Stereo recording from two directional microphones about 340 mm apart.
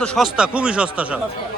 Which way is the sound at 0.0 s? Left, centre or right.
Centre.